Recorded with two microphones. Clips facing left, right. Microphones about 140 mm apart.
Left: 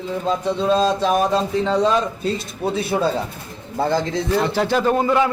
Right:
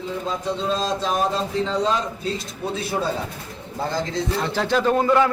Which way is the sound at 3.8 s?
60° left (ahead or behind).